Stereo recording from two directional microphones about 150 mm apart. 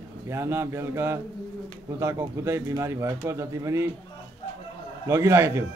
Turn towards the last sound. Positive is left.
turn(degrees=-20)  # may be behind; listen again after turning